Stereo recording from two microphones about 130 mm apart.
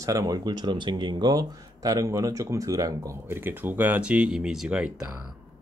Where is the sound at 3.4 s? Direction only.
15° right (ahead or behind).